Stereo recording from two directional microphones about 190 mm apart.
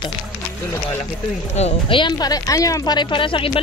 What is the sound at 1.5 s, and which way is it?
Speech, 30° left (ahead or behind).